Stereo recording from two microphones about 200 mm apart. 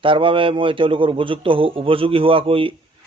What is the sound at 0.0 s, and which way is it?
A man's voice, 25° right (ahead or behind).